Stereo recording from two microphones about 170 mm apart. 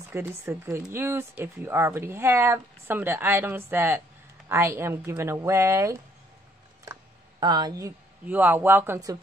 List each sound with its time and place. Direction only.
0.1 s speech: 15° right (ahead or behind)